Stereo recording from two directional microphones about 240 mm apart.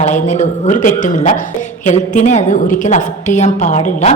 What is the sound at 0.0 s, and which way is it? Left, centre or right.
A woman's voice, left.